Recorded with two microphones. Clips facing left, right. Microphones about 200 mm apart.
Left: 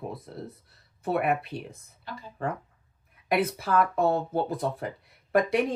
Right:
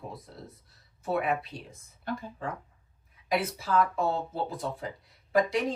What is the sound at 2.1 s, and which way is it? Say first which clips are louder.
Speech: right 7 dB; 50° right (ahead or behind).